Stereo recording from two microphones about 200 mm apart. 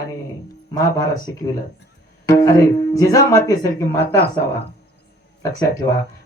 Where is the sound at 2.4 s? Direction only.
15° left (ahead or behind).